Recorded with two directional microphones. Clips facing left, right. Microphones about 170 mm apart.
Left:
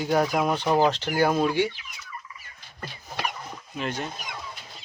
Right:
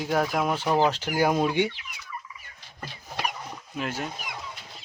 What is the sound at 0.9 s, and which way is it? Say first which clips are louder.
Fowl: left 1 dB; 10° right (ahead or behind).